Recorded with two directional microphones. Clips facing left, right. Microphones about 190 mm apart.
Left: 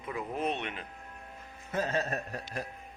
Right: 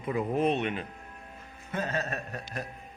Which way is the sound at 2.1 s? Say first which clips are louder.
Even; 35° left (ahead or behind).